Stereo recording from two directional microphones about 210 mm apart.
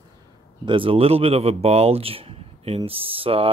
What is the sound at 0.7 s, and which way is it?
Speech, 25° right (ahead or behind).